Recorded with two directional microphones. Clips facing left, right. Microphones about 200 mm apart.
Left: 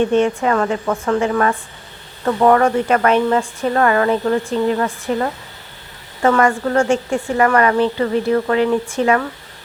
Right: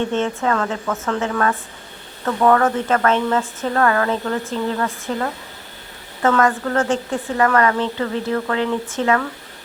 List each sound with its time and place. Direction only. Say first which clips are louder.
0.0 s speech: left 5 dB; 15° left (ahead or behind)
6.2 s speech: left 2 dB; 15° left (ahead or behind)